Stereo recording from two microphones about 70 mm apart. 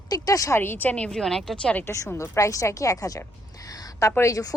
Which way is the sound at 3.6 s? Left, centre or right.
Left.